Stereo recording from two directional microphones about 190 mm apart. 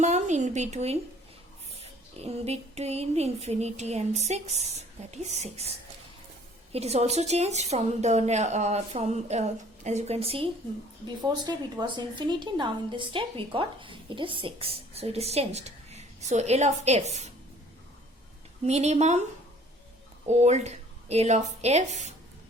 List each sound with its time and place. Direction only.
0.0 s speech: 40° right (ahead or behind)
6.7 s a woman's voice: 35° right (ahead or behind)
18.6 s speech: 35° right (ahead or behind)
20.2 s speech: 35° right (ahead or behind)